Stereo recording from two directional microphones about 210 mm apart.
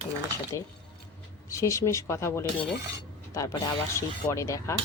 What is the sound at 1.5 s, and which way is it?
A woman's voice, 15° left (ahead or behind).